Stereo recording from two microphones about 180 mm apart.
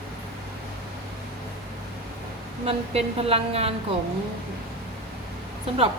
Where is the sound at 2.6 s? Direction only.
35° right (ahead or behind).